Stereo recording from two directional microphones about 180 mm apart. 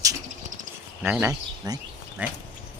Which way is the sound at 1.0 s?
10° right (ahead or behind).